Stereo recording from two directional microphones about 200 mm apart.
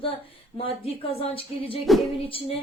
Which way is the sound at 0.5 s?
30° left (ahead or behind).